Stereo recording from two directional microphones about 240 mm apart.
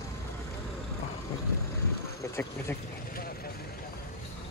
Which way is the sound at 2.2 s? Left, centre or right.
Centre.